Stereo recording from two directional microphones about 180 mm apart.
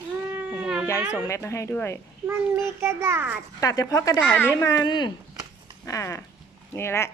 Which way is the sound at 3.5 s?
20° left (ahead or behind).